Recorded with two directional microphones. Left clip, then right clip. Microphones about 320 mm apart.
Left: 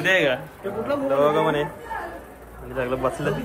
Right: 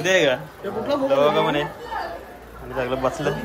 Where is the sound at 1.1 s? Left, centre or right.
Centre.